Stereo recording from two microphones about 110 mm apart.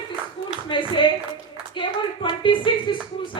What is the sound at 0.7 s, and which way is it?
Clapping, 50° left (ahead or behind).